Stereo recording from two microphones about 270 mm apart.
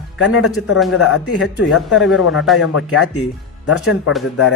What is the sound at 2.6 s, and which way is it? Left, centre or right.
Speech, left.